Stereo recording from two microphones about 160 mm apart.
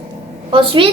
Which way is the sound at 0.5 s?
35° right (ahead or behind).